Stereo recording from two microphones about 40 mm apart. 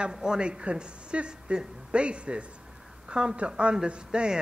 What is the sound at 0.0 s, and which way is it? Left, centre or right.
Speech, centre.